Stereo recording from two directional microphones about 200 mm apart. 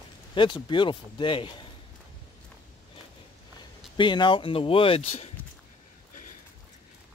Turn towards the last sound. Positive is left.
turn(degrees=30)  # may be behind; listen again after turning